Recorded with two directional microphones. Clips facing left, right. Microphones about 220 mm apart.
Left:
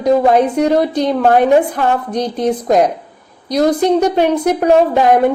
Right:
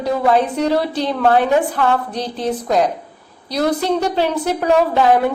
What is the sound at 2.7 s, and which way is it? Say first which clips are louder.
Speech: left 4 dB; 45° left (ahead or behind).